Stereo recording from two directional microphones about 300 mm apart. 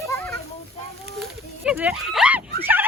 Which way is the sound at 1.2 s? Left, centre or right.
Centre.